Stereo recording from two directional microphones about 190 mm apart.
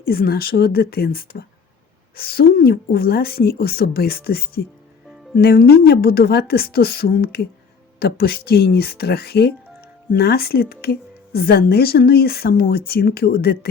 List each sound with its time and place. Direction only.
0.0 s speech: 50° left (ahead or behind)